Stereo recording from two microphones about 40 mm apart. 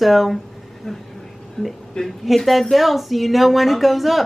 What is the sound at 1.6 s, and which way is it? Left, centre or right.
Speech, centre.